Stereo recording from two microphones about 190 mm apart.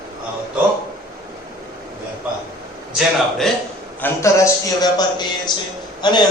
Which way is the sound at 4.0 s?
15° left (ahead or behind).